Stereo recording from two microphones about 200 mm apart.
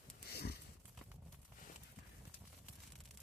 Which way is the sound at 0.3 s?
55° left (ahead or behind).